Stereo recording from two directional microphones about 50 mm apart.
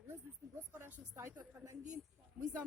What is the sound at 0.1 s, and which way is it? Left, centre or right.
Speech, right.